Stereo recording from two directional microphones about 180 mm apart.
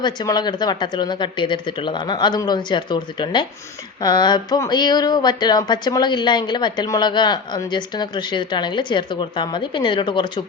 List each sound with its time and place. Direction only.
0.0 s speech: 25° left (ahead or behind)